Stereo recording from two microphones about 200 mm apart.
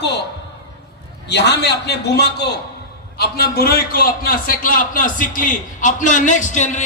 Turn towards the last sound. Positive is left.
turn(degrees=35)  # may be behind; listen again after turning